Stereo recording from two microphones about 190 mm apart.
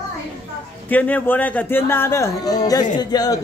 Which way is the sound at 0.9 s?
10° left (ahead or behind).